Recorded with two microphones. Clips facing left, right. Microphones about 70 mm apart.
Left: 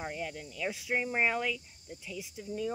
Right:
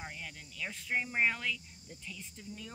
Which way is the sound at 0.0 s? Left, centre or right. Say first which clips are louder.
Left 8 dB; centre.